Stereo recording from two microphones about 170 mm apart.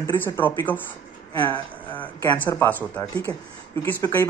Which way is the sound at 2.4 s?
10° left (ahead or behind).